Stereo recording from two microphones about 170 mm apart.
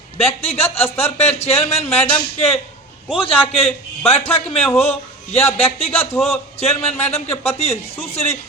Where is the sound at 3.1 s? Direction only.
30° left (ahead or behind).